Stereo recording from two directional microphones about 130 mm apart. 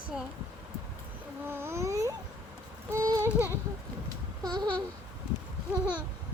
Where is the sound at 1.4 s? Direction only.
20° right (ahead or behind).